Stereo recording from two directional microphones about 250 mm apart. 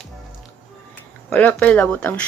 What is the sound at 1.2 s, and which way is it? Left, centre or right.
Speech, centre.